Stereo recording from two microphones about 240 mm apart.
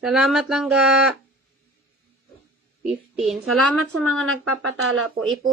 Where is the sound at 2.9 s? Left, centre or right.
Centre.